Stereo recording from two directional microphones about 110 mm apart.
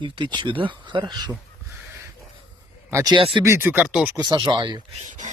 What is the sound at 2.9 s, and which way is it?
Speech, 25° right (ahead or behind).